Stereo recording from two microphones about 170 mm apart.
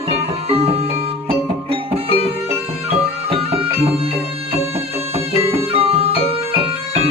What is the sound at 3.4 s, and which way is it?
Music, 35° right (ahead or behind).